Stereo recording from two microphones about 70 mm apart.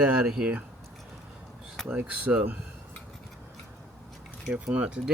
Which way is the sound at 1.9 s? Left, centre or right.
Right.